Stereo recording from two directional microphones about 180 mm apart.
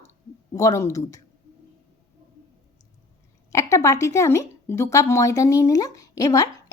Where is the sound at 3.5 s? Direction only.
15° left (ahead or behind).